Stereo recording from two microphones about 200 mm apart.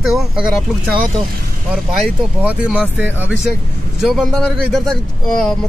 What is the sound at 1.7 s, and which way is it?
A man's voice, 5° right (ahead or behind).